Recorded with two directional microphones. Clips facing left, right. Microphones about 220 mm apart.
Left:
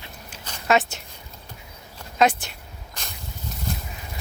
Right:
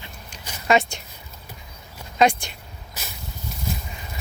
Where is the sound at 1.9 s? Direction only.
5° left (ahead or behind).